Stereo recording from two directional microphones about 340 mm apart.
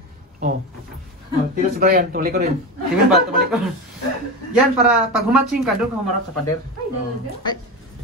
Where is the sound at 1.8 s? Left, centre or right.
Right.